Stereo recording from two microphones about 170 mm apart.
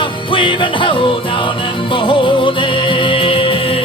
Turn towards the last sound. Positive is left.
turn(degrees=30)  # may be behind; listen again after turning